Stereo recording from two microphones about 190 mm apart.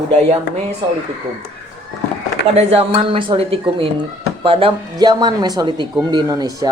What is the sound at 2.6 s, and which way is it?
Speech, 30° right (ahead or behind).